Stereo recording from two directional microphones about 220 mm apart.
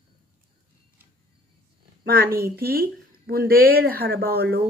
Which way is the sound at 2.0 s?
45° right (ahead or behind).